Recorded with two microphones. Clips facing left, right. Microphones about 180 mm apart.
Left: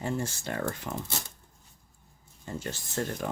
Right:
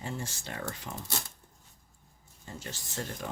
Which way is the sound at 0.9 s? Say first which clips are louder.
Left 6 dB; 65° left (ahead or behind).